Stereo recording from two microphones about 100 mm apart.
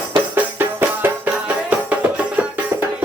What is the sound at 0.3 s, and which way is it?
Music, 20° right (ahead or behind).